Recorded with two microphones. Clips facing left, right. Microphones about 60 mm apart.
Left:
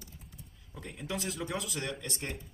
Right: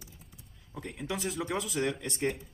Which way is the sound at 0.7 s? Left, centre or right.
Centre.